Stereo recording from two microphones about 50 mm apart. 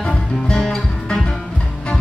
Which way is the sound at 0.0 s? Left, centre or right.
Centre.